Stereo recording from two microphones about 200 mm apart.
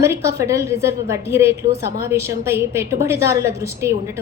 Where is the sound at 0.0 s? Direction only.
15° right (ahead or behind).